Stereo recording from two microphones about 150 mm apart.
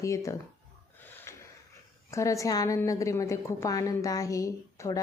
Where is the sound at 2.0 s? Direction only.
20° left (ahead or behind).